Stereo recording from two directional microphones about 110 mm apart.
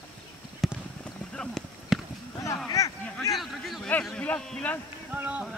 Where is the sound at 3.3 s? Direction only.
Centre (ahead or behind).